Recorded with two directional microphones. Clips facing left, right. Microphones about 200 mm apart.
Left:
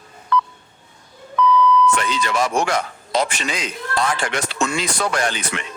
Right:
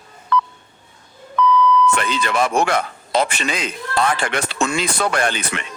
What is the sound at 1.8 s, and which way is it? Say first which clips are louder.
Speech: even; 60° right (ahead or behind).